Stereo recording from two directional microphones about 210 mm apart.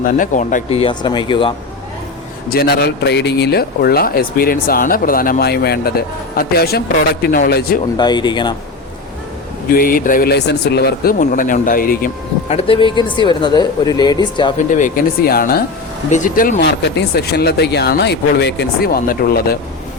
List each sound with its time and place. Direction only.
0.0 s speech: 40° left (ahead or behind); by 1.5 s 25° left (ahead or behind)
2.5 s a man's voice: 50° left (ahead or behind)
7.9 s speech: 20° left (ahead or behind)
9.7 s a man's voice: 40° left (ahead or behind)
12.5 s speech: 25° left (ahead or behind)
14.7 s a man's voice: 40° left (ahead or behind)